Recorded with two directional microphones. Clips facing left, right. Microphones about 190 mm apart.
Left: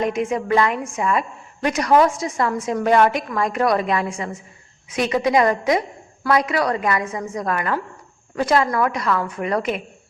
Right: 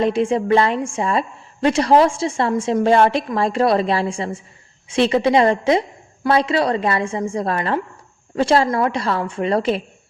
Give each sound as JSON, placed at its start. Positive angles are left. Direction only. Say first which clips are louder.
{"t": 0.0, "sound": "a woman's voice", "louder": "right 4 dB", "side_deg": -30}